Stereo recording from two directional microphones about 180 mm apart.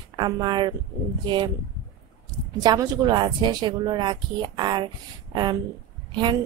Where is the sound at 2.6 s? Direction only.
20° right (ahead or behind).